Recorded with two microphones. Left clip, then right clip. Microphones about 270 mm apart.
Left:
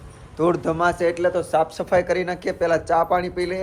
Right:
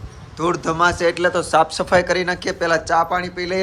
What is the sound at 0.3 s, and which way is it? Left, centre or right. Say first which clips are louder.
Speech: right 2 dB; centre.